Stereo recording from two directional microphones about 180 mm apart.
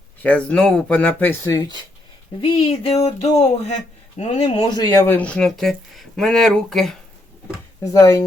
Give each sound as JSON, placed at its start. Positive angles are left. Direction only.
{"t": 0.2, "sound": "speech", "side_deg": 5}
{"t": 2.4, "sound": "a sound", "side_deg": 30}
{"t": 5.0, "sound": "speech", "side_deg": 10}
{"t": 7.5, "sound": "speech", "side_deg": 15}